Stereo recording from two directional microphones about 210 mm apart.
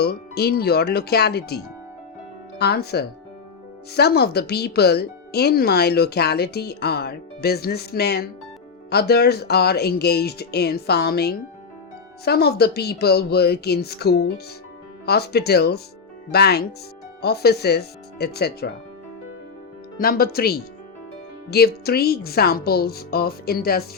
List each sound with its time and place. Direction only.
0.0 s speech: 50° left (ahead or behind)
2.6 s speech: 50° left (ahead or behind)
20.0 s speech: 45° left (ahead or behind)